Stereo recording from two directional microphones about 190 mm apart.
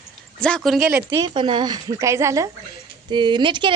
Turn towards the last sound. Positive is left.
turn(degrees=-25)  # may be behind; listen again after turning